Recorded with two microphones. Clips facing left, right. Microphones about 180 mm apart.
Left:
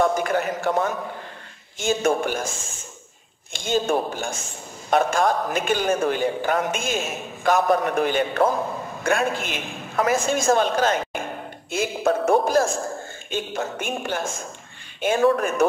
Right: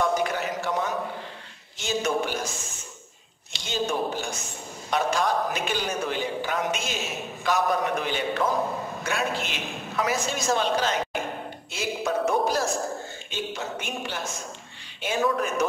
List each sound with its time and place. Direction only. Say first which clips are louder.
0.0 s a sound: left 4 dB; 50° left (ahead or behind)
1.8 s a man's voice: left 5 dB; 50° left (ahead or behind)
3.5 s a man's voice: left 6 dB; 50° left (ahead or behind)